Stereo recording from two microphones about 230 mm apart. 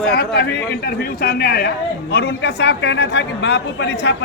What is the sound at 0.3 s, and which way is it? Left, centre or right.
Speech, left.